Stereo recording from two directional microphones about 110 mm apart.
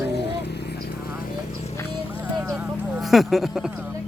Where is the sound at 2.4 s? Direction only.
10° right (ahead or behind).